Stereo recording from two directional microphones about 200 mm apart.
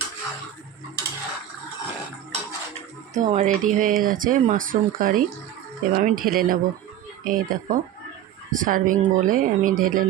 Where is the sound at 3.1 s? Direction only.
35° right (ahead or behind).